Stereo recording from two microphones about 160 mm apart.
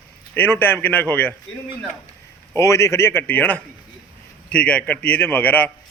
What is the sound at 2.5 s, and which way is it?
Speech, 15° left (ahead or behind).